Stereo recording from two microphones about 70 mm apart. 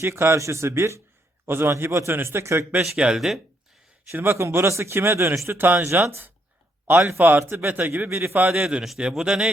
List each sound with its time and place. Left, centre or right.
0.0 s a man's voice: right
2.9 s a man's voice: centre
4.1 s a man's voice: right
7.3 s a man's voice: right
7.7 s speech: right
8.1 s a man's voice: right
8.5 s a man's voice: centre